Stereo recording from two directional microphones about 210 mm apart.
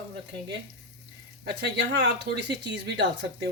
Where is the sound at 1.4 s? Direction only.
55° right (ahead or behind).